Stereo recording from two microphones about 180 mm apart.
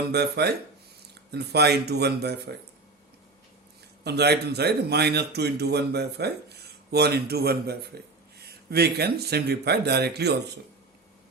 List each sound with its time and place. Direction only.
0.1 s a man's voice: 65° right (ahead or behind)
4.0 s a man's voice: 65° right (ahead or behind)